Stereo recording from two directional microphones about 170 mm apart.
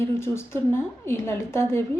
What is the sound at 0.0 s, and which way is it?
A woman's voice, 15° left (ahead or behind).